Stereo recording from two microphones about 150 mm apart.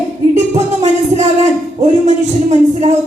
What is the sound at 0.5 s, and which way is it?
Music, 50° right (ahead or behind).